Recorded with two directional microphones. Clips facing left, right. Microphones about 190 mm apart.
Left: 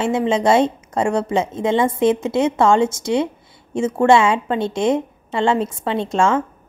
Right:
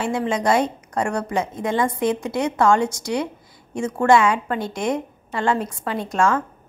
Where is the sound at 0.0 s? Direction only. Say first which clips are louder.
Left 4 dB; 25° left (ahead or behind).